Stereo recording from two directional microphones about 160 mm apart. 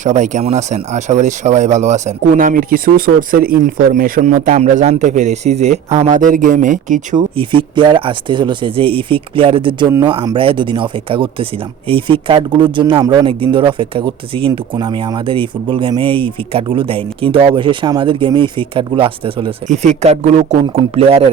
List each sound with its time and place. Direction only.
0.0 s speech: 50° right (ahead or behind)
7.3 s speech: 30° right (ahead or behind)
19.6 s speech: 45° right (ahead or behind)